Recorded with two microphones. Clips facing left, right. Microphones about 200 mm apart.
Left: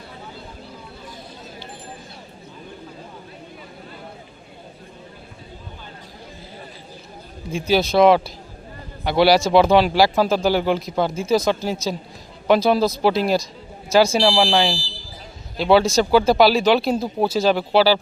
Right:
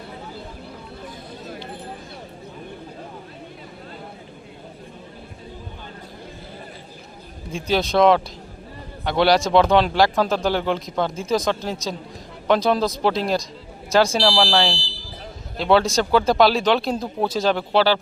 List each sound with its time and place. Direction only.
7.5 s speech: 5° left (ahead or behind)